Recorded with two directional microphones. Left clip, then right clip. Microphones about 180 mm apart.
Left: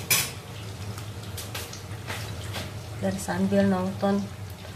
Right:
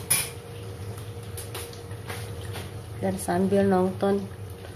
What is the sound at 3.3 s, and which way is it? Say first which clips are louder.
Speech: right 3 dB; 35° right (ahead or behind).